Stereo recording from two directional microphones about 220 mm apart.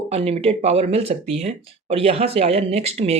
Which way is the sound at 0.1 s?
25° right (ahead or behind).